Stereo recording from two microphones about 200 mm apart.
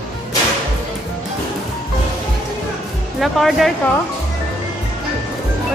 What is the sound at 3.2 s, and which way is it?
Speech, centre (ahead or behind).